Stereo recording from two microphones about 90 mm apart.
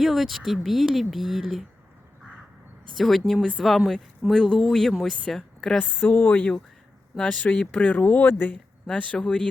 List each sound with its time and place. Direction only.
0.0 s speech: centre (ahead or behind)
3.0 s a woman's voice: centre (ahead or behind)
5.8 s speech: 20° left (ahead or behind)